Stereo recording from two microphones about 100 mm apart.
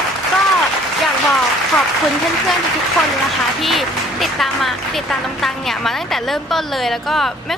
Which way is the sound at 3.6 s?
Centre (ahead or behind).